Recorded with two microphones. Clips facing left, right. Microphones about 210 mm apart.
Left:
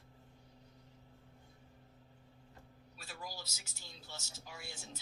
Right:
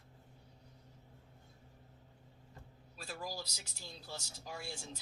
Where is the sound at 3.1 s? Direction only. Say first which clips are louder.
Right 5 dB; 35° right (ahead or behind).